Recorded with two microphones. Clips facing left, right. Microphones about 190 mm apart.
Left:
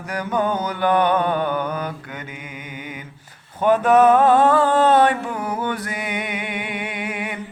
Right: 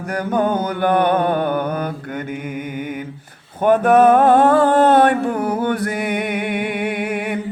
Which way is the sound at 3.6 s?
55° right (ahead or behind).